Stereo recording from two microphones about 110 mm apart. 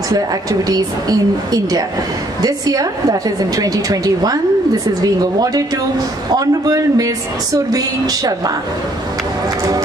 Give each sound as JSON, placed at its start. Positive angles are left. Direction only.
{"t": 0.1, "sound": "a woman's voice", "side_deg": -35}